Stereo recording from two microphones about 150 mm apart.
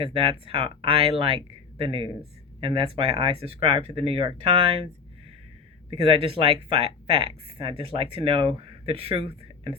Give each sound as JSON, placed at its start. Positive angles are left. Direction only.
{"t": 0.0, "sound": "speech", "side_deg": -35}
{"t": 5.9, "sound": "speech", "side_deg": -40}